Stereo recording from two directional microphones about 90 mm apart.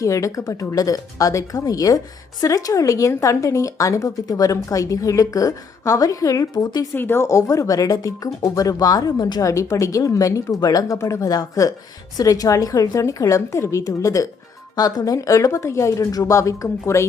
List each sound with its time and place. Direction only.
0.0 s speech: 35° left (ahead or behind)
6.5 s a woman's voice: 55° left (ahead or behind)
6.9 s speech: 25° left (ahead or behind)